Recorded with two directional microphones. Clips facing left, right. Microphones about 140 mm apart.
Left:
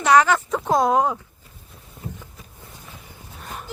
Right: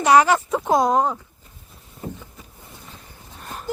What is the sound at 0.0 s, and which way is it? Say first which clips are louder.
Speech: right 1 dB; 15° right (ahead or behind).